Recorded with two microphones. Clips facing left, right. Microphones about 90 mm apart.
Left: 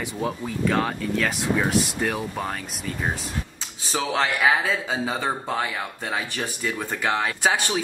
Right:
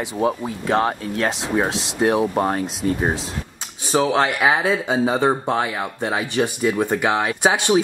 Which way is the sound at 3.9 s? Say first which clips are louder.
Right 6 dB; 20° right (ahead or behind).